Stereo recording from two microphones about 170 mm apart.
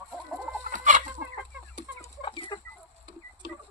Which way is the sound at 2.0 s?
30° left (ahead or behind).